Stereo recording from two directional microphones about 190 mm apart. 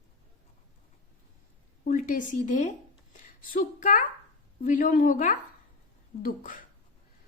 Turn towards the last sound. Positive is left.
turn(degrees=45)  # may be behind; listen again after turning